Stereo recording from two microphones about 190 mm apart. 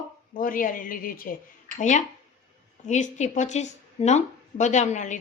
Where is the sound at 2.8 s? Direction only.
40° left (ahead or behind).